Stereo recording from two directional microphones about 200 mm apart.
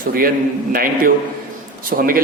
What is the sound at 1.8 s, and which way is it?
Speech, 45° right (ahead or behind).